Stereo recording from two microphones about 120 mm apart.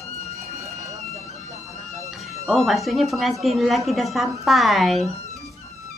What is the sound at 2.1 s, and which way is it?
A woman's voice, centre (ahead or behind).